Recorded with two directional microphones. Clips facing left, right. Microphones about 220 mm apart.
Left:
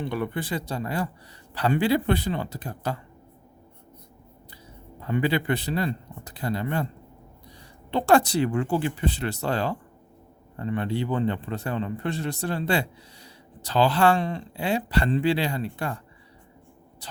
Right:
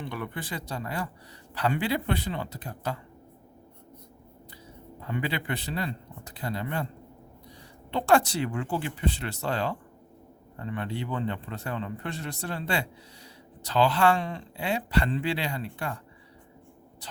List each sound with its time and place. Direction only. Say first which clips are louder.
0.0 s speech: left 7 dB; 30° left (ahead or behind)
5.0 s speech: left 7 dB; 40° left (ahead or behind)
7.9 s speech: left 3 dB; 35° left (ahead or behind)